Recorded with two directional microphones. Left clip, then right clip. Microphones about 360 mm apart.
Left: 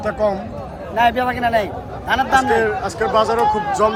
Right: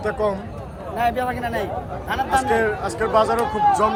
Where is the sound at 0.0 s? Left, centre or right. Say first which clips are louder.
Left 3 dB; centre.